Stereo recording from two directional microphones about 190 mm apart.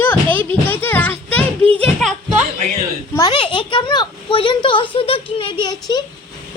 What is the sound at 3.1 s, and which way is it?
A child's voice, 25° left (ahead or behind).